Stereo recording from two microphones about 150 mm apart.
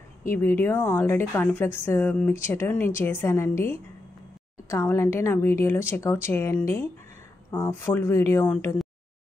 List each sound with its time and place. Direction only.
0.3 s a woman's voice: 15° left (ahead or behind)